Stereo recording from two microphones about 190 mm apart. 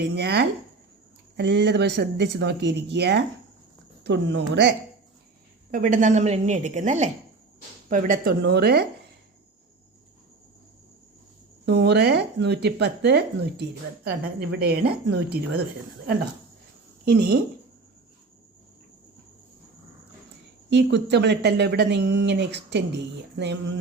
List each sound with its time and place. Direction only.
0.2 s speech: 60° right (ahead or behind)
5.7 s a woman's voice: 45° right (ahead or behind)
11.6 s speech: 65° right (ahead or behind)
17.1 s speech: 55° right (ahead or behind)
20.7 s speech: 65° right (ahead or behind)